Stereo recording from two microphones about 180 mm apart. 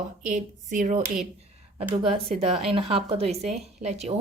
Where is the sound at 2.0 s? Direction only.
30° right (ahead or behind).